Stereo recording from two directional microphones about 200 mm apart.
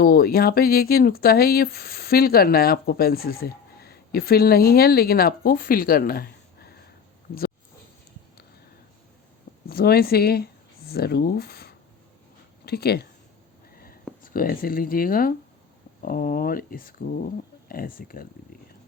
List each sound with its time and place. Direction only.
0.0 s speech: 50° left (ahead or behind)
9.6 s speech: 50° left (ahead or behind)
14.2 s speech: 45° left (ahead or behind)